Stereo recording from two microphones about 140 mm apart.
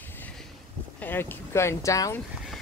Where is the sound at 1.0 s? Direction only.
15° left (ahead or behind).